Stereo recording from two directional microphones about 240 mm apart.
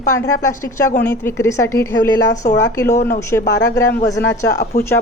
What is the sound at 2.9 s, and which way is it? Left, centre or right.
Speech, left.